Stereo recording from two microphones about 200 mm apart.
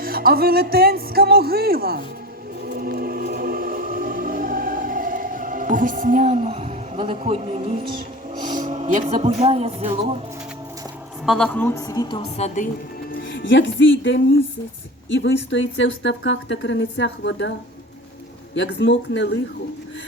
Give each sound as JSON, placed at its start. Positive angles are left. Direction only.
{"t": 0.0, "sound": "speech", "side_deg": -50}
{"t": 2.6, "sound": "music", "side_deg": -50}
{"t": 8.4, "sound": "speech", "side_deg": -40}
{"t": 11.3, "sound": "a woman's voice", "side_deg": 5}
{"t": 12.2, "sound": "a woman's voice", "side_deg": 35}
{"t": 13.2, "sound": "a woman's voice", "side_deg": 65}
{"t": 18.5, "sound": "a woman's voice", "side_deg": 65}